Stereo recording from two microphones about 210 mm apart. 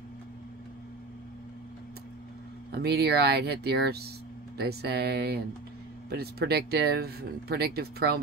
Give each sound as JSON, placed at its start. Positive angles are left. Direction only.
{"t": 2.7, "sound": "speech", "side_deg": -50}